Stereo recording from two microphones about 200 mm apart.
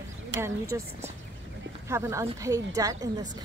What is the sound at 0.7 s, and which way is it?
A woman's voice, 15° right (ahead or behind).